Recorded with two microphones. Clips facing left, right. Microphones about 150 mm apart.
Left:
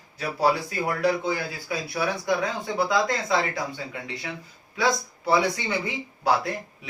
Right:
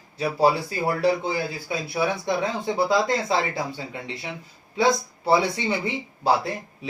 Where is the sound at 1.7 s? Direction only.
25° right (ahead or behind).